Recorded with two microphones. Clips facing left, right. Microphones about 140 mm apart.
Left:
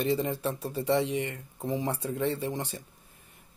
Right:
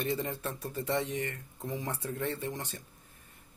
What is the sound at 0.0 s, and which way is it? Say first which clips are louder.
Speech: left 5 dB; 20° left (ahead or behind).